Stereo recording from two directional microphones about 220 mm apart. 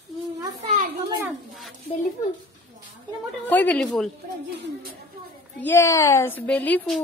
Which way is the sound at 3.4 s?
5° left (ahead or behind).